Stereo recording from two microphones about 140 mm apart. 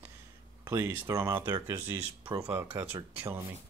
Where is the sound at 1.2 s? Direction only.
15° right (ahead or behind).